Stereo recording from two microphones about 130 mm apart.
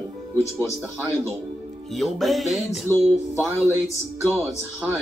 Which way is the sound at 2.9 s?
15° left (ahead or behind).